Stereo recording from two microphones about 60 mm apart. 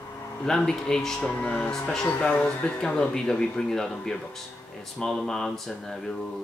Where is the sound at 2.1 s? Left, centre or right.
Left.